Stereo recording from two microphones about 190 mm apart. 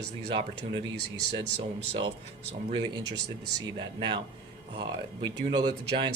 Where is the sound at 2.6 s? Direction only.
20° right (ahead or behind).